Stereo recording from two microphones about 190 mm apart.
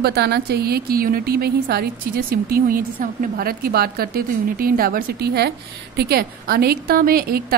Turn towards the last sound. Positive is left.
turn(degrees=-50)  # may be behind; listen again after turning